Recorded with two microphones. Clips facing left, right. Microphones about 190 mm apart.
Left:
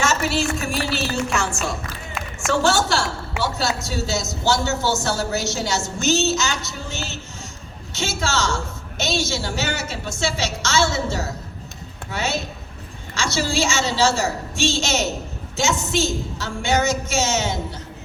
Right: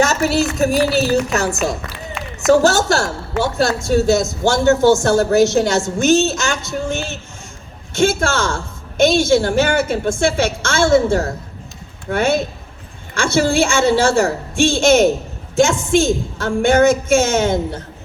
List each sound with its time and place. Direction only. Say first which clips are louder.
0.0 s a woman's voice: right 6 dB; 40° right (ahead or behind)